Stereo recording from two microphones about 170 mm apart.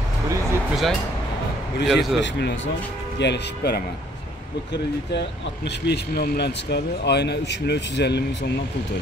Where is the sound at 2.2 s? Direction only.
75° left (ahead or behind).